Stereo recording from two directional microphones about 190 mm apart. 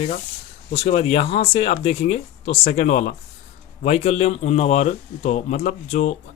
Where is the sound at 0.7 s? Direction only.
35° left (ahead or behind).